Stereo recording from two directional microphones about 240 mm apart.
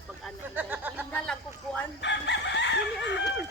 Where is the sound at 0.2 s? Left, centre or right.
Centre.